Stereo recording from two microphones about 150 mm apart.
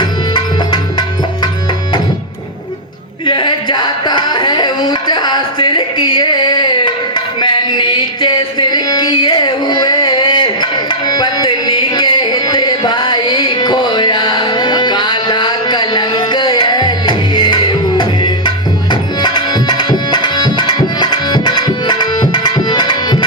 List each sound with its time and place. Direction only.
0.0 s tabla: 30° left (ahead or behind)
3.2 s music: 35° left (ahead or behind)